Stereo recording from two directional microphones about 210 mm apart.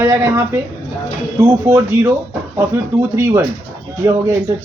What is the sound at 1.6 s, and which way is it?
Speech, 10° right (ahead or behind).